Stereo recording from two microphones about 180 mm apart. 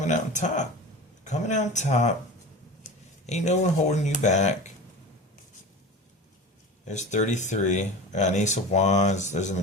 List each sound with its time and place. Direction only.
0.0 s speech: 40° left (ahead or behind)
3.2 s speech: 40° left (ahead or behind)
6.8 s speech: 40° left (ahead or behind)